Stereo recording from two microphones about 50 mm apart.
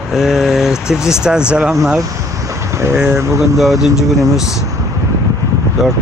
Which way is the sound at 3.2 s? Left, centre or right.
Right.